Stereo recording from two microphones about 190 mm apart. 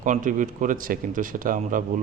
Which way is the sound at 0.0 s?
40° right (ahead or behind).